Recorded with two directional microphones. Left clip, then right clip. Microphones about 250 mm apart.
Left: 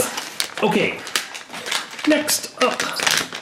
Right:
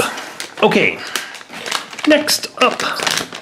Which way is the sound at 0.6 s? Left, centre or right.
Centre.